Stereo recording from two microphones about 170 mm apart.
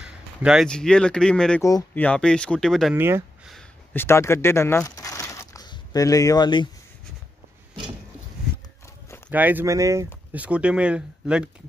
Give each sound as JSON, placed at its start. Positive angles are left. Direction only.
{"t": 0.0, "sound": "speech", "side_deg": -5}
{"t": 1.6, "sound": "speech", "side_deg": 20}
{"t": 2.0, "sound": "speech", "side_deg": 5}
{"t": 2.9, "sound": "speech", "side_deg": -15}
{"t": 3.9, "sound": "speech", "side_deg": 15}
{"t": 9.3, "sound": "speech", "side_deg": -10}
{"t": 10.3, "sound": "speech", "side_deg": -5}